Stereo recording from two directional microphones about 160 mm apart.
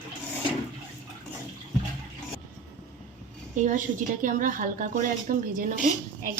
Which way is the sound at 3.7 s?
55° right (ahead or behind).